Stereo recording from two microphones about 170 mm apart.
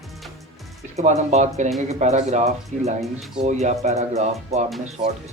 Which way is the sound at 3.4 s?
40° right (ahead or behind).